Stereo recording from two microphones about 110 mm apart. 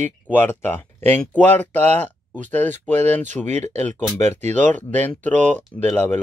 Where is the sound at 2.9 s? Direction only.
90° right.